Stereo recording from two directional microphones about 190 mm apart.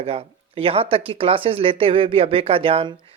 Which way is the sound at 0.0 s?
30° right (ahead or behind).